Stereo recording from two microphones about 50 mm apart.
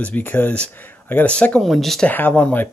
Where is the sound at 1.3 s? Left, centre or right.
Left.